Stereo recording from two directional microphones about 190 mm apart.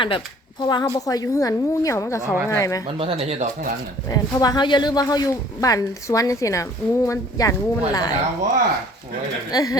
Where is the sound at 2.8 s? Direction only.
30° right (ahead or behind).